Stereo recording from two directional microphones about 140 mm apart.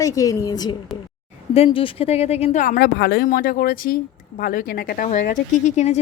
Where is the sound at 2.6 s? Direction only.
85° left.